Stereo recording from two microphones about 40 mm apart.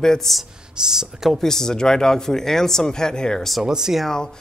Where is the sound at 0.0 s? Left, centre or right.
Centre.